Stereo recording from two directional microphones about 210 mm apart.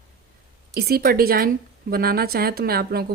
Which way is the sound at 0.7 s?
50° right (ahead or behind).